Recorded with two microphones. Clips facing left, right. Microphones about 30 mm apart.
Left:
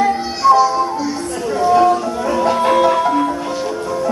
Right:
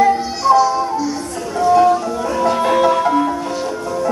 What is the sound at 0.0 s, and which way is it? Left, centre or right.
Music, centre.